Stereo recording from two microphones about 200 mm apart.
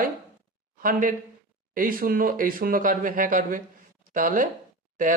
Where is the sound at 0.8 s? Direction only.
45° right (ahead or behind).